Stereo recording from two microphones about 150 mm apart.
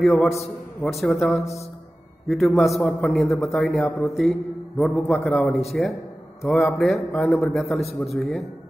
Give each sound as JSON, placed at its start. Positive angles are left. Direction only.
{"t": 0.0, "sound": "a man's voice", "side_deg": 0}
{"t": 0.8, "sound": "speech", "side_deg": 15}
{"t": 2.2, "sound": "a man's voice", "side_deg": 0}